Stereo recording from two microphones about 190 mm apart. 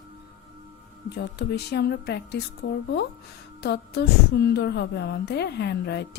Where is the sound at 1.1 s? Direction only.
60° left (ahead or behind).